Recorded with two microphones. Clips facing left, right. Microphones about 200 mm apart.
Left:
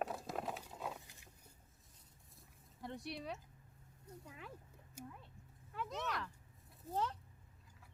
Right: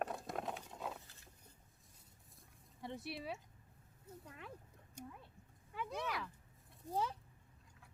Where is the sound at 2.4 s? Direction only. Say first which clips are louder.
Even; centre (ahead or behind).